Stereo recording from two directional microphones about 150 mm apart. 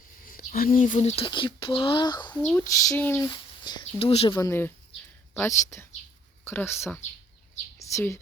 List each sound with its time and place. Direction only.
0.3 s speech: 75° left (ahead or behind); by 2.3 s 30° left (ahead or behind)
2.6 s speech: 15° left (ahead or behind)
3.2 s speech: 30° left (ahead or behind)
4.4 s speech: 20° left (ahead or behind)
7.8 s a sound: 20° left (ahead or behind)